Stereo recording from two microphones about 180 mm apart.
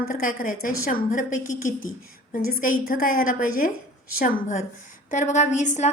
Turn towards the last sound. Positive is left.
turn(degrees=45)  # may be behind; listen again after turning